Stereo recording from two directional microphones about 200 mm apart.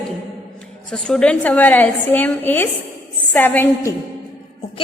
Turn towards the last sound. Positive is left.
turn(degrees=10)  # may be behind; listen again after turning